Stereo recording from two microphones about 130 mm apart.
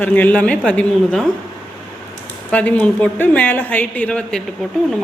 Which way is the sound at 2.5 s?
10° left (ahead or behind).